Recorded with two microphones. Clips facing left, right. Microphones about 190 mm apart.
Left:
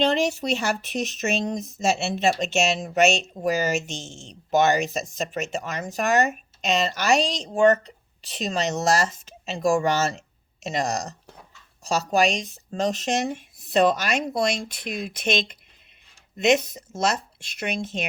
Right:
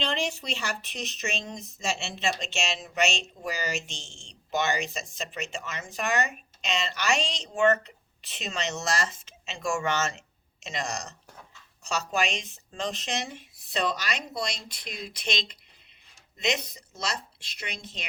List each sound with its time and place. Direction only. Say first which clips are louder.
0.0 s a woman's voice: left 9 dB; 45° left (ahead or behind)
11.9 s a woman's voice: left 7 dB; 40° left (ahead or behind)